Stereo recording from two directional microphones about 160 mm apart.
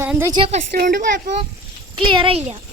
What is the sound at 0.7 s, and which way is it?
Speech, 60° right (ahead or behind).